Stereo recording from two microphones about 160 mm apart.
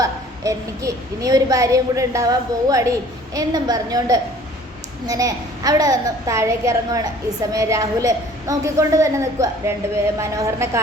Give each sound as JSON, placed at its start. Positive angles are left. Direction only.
{"t": 0.0, "sound": "a woman's voice", "side_deg": -20}